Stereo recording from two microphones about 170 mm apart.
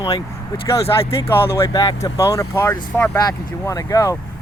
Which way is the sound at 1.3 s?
15° left (ahead or behind).